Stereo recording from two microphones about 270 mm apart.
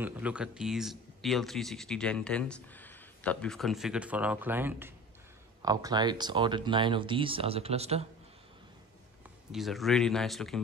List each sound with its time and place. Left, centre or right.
0.0 s speech: centre; by 8.1 s right
9.5 s speech: centre